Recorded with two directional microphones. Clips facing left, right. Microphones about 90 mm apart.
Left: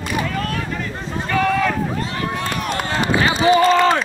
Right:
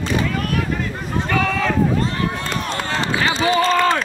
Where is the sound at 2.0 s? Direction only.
35° right (ahead or behind).